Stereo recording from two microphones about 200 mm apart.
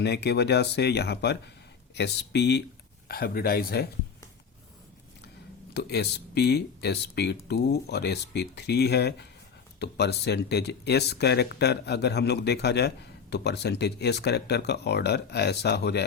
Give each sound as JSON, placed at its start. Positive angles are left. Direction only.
{"t": 0.0, "sound": "speech", "side_deg": 55}
{"t": 5.7, "sound": "speech", "side_deg": 55}